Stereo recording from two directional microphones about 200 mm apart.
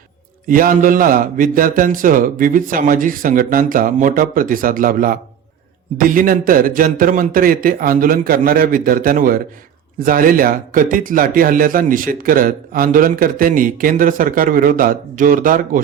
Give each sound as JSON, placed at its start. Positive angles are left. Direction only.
{"t": 0.4, "sound": "speech", "side_deg": -45}